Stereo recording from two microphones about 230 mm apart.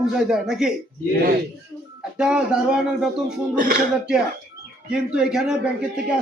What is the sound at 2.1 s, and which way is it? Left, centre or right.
Speech, centre.